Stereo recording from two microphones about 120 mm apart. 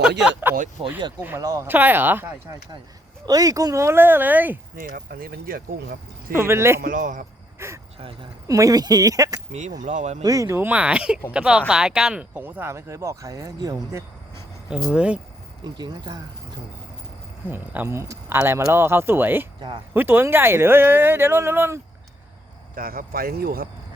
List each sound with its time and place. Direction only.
0.0 s speech: 10° right (ahead or behind)
0.8 s speech: 50° right (ahead or behind)
1.4 s speech: 30° right (ahead or behind)
1.6 s speech: 15° right (ahead or behind)
3.2 s speech: 30° right (ahead or behind); by 4.5 s 15° right (ahead or behind)
6.3 s speech: 20° right (ahead or behind)
6.9 s a man's voice: 90° right
7.6 s speech: 20° right (ahead or behind)
9.5 s speech: 75° right (ahead or behind)
10.2 s speech: 25° right (ahead or behind)
14.8 s speech: 10° right (ahead or behind)
15.6 s speech: 35° right (ahead or behind)
17.5 s speech: 15° right (ahead or behind)